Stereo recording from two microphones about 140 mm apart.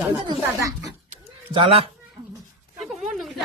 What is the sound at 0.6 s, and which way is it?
Speech, 25° right (ahead or behind).